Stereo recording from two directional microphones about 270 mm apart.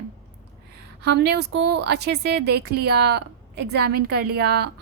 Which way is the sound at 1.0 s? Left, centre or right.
Right.